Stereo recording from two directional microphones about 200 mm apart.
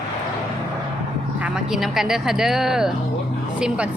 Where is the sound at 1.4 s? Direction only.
5° right (ahead or behind).